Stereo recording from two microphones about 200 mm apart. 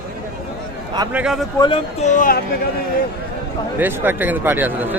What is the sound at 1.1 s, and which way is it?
Speech, 5° right (ahead or behind).